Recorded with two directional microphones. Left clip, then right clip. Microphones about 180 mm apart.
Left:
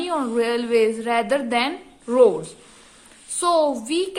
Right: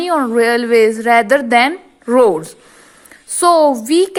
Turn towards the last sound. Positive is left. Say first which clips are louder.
# right 10 dB
turn(degrees=-40)  # may be behind; listen again after turning